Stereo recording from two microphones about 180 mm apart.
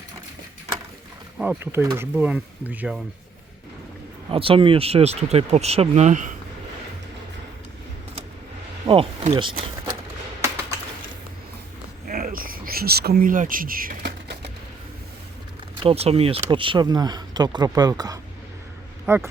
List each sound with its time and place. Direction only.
1.4 s speech: 10° right (ahead or behind)
4.3 s speech: 30° right (ahead or behind)
8.9 s speech: 30° right (ahead or behind)
12.0 s cricket: 50° right (ahead or behind)
15.8 s speech: 30° right (ahead or behind); by 19.3 s 10° right (ahead or behind)